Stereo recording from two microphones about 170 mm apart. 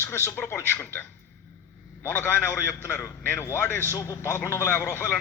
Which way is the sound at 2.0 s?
10° left (ahead or behind).